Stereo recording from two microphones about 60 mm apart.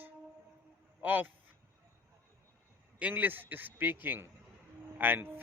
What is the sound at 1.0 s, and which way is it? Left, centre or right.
Speech, right.